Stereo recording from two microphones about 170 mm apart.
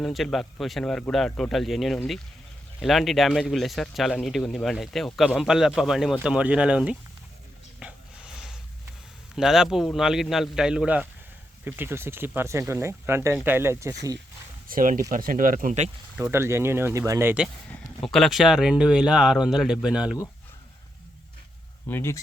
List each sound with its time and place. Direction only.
0.0 s speech: centre (ahead or behind)
7.8 s a sound: 5° right (ahead or behind)
9.3 s speech: 5° right (ahead or behind)
14.7 s speech: 55° right (ahead or behind)
16.1 s speech: 10° right (ahead or behind)
17.7 s speech: centre (ahead or behind)
21.8 s speech: 15° left (ahead or behind)